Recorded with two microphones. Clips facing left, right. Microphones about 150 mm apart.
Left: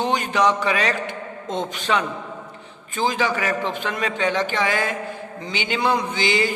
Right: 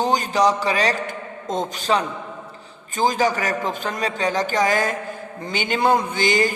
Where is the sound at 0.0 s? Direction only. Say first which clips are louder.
Right 1 dB; 35° right (ahead or behind).